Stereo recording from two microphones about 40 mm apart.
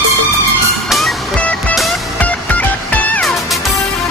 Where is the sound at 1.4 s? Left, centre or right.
Left.